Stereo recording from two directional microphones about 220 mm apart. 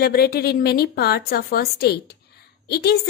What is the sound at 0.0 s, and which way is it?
A woman's voice, 45° left (ahead or behind).